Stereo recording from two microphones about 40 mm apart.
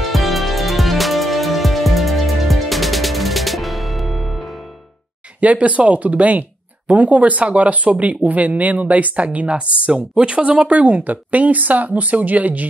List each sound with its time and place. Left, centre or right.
0.1 s music: centre
5.4 s speech: right
10.7 s speech: right